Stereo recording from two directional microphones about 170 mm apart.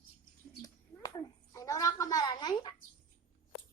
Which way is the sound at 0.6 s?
25° left (ahead or behind).